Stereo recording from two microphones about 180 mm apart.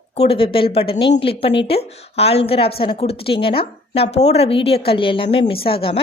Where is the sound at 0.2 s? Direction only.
30° left (ahead or behind).